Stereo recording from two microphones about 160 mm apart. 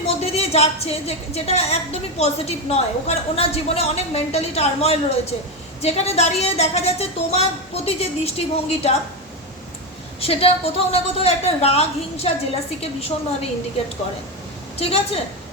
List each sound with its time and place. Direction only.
0.1 s a woman's voice: 40° left (ahead or behind)
10.2 s a woman's voice: 40° left (ahead or behind)
14.8 s a woman's voice: 40° left (ahead or behind)